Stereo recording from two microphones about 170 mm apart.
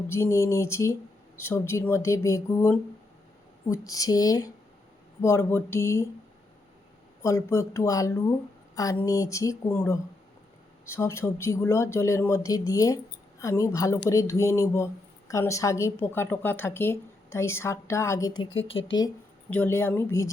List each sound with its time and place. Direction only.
0.1 s speech: 15° left (ahead or behind)
7.2 s speech: 20° left (ahead or behind)
18.7 s speech: 90° left
19.5 s speech: 10° left (ahead or behind)